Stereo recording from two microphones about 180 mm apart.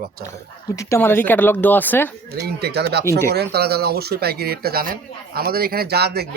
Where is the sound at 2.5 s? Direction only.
65° right (ahead or behind).